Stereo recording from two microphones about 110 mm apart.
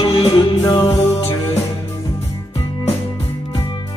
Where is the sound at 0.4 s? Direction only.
55° left (ahead or behind).